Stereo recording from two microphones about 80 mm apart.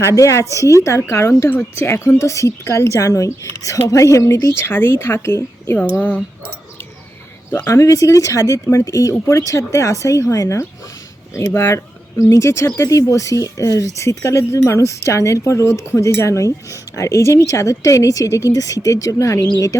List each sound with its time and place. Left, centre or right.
0.0 s speech: left
7.7 s speech: left